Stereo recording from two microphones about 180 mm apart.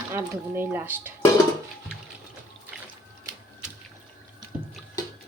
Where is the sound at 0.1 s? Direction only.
10° right (ahead or behind).